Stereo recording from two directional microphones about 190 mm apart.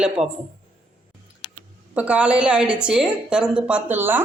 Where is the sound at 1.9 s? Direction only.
5° right (ahead or behind).